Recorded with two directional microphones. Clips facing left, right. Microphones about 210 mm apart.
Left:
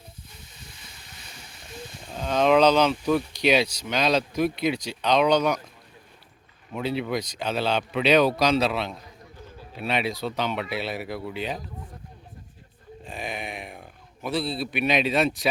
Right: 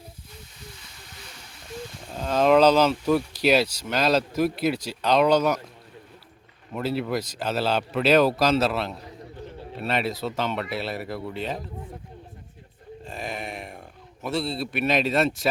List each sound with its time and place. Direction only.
2.1 s speech: 5° right (ahead or behind)
6.7 s speech: centre (ahead or behind)
13.1 s a man's voice: centre (ahead or behind)